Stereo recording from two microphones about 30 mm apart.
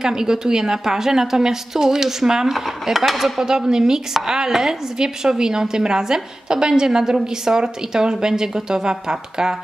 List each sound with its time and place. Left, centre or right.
0.0 s a woman's voice: centre
2.5 s dishes: centre
3.3 s a woman's voice: right